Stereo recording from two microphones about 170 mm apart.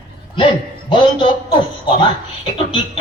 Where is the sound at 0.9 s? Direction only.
30° left (ahead or behind).